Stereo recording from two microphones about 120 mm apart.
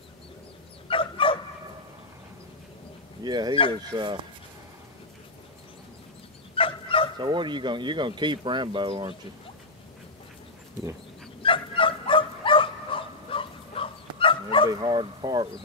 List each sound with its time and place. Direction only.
0.8 s dog: 50° left (ahead or behind)
3.3 s speech: 35° right (ahead or behind)
6.5 s dog: 50° left (ahead or behind)
7.2 s speech: 40° right (ahead or behind)
11.4 s bow-wow: 45° left (ahead or behind)
14.7 s speech: 35° right (ahead or behind)